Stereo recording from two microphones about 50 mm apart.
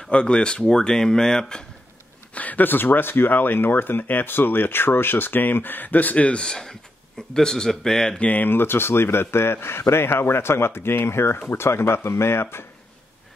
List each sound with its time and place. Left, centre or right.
0.1 s speech: left
2.3 s a man's voice: left
6.4 s speech: centre
8.2 s speech: left
8.5 s a man's voice: left